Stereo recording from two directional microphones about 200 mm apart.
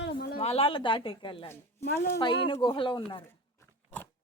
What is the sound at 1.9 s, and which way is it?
Speech, 50° left (ahead or behind).